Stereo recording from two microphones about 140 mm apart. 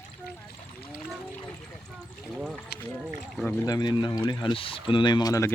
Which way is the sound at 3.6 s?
30° left (ahead or behind).